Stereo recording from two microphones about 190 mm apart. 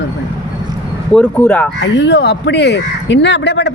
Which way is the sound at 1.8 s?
70° left (ahead or behind).